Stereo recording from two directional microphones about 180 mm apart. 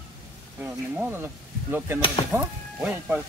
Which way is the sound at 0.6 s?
10° right (ahead or behind).